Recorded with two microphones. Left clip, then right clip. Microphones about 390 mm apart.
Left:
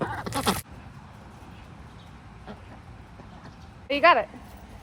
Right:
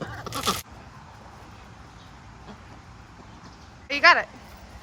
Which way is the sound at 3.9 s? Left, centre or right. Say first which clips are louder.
Right 1 dB; centre.